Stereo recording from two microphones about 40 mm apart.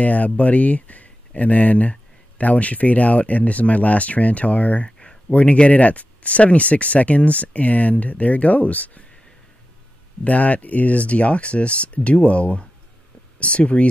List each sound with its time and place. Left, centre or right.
0.0 s speech: left
10.2 s speech: left